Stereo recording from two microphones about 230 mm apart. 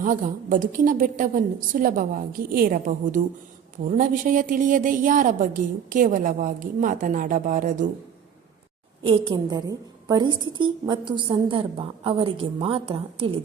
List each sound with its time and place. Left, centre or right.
0.0 s a woman's voice: right
9.0 s a woman's voice: right